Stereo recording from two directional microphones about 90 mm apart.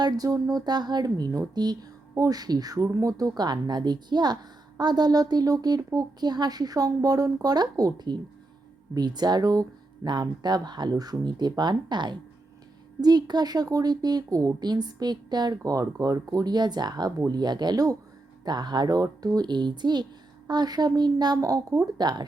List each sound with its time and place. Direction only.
0.0 s a woman's voice: 40° right (ahead or behind)